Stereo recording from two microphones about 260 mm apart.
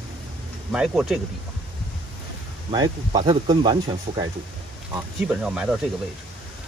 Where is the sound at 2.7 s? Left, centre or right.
Centre.